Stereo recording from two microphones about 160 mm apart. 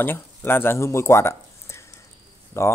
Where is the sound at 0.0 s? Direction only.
15° left (ahead or behind).